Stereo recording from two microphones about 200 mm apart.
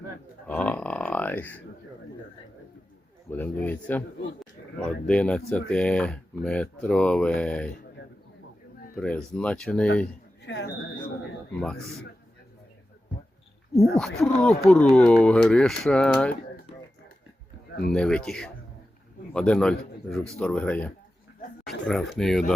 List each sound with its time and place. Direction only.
0.4 s grunt: 5° left (ahead or behind)
3.2 s speech: 10° left (ahead or behind)
4.8 s speech: 5° left (ahead or behind)
9.0 s speech: 5° left (ahead or behind)
10.4 s a sound: 60° left (ahead or behind)
13.9 s speech: centre (ahead or behind)
17.9 s a man's voice: 5° left (ahead or behind)